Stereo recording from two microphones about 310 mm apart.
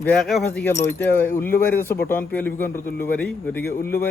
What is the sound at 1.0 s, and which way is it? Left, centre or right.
Speech, centre.